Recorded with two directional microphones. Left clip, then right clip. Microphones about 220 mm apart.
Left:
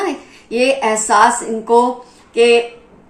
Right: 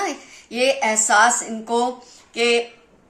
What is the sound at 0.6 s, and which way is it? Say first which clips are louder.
Speech: left 4 dB; 45° right (ahead or behind).